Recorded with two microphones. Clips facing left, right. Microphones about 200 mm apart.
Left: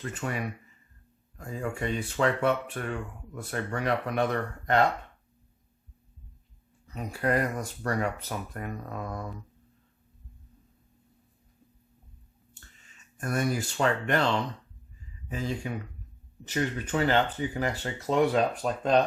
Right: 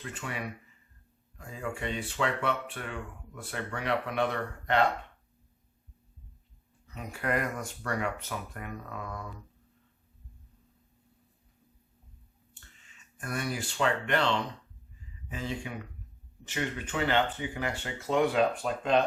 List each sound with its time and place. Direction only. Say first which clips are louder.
0.0 s speech: left 5 dB; 45° left (ahead or behind)
6.8 s speech: left 5 dB; 35° left (ahead or behind)
13.1 s speech: left 6 dB; 45° left (ahead or behind)
15.3 s speech: left 4 dB; 40° left (ahead or behind)